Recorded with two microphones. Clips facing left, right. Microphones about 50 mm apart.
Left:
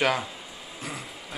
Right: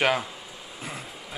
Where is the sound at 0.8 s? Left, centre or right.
Centre.